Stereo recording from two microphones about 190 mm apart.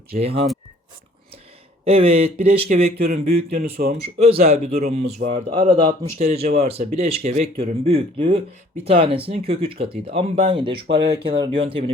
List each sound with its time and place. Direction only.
0.2 s speech: 30° right (ahead or behind)
1.8 s speech: 30° right (ahead or behind)
3.1 s speech: 55° right (ahead or behind)
4.2 s speech: 35° right (ahead or behind)
10.8 s speech: 65° right (ahead or behind)
11.3 s speech: 25° right (ahead or behind)